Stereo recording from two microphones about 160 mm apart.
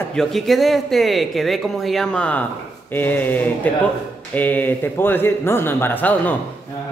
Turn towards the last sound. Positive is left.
turn(degrees=10)  # may be behind; listen again after turning